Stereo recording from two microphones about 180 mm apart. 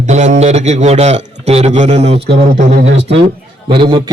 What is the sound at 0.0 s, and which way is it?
Speech, 40° right (ahead or behind).